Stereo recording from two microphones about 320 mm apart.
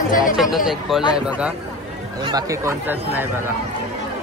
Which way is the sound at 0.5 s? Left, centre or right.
Centre.